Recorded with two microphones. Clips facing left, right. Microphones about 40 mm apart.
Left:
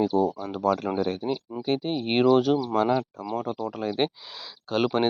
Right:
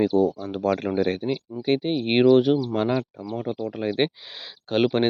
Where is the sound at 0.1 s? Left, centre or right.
Left.